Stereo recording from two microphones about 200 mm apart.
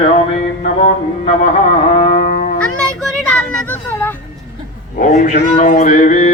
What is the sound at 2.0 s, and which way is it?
Music, 40° left (ahead or behind).